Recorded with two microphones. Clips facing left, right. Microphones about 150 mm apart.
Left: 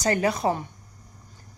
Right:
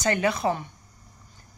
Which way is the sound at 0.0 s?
35° left (ahead or behind).